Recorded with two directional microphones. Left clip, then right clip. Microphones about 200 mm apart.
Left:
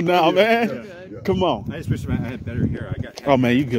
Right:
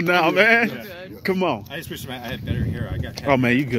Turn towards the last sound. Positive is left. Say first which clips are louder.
# left 1 dB
turn(degrees=15)  # may be behind; listen again after turning